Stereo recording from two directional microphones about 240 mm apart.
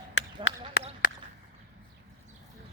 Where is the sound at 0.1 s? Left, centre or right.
Left.